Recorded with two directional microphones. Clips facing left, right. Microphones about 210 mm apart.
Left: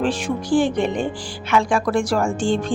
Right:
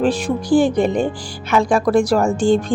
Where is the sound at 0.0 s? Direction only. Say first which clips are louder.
Right 4 dB; 40° right (ahead or behind).